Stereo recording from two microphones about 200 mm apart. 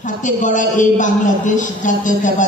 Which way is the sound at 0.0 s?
40° left (ahead or behind).